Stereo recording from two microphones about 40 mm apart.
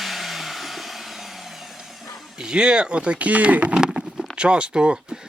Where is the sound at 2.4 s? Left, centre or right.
Right.